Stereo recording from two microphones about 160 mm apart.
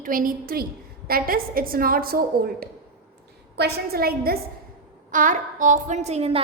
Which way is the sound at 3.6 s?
90° right.